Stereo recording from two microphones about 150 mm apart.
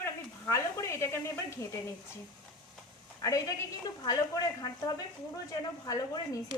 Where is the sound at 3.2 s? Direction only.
25° left (ahead or behind).